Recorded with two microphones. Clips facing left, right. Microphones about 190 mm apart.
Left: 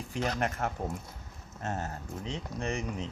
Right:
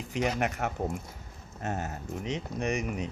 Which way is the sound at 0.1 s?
15° right (ahead or behind).